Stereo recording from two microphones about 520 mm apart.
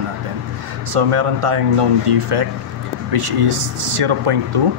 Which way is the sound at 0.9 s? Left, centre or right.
Right.